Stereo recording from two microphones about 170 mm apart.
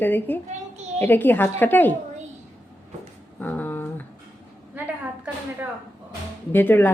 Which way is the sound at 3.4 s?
10° left (ahead or behind).